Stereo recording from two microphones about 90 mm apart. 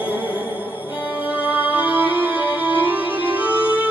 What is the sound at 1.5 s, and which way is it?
Music, 15° right (ahead or behind).